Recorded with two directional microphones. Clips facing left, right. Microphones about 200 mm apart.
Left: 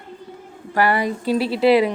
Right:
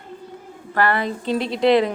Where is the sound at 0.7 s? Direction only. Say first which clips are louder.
Left 2 dB; 10° left (ahead or behind).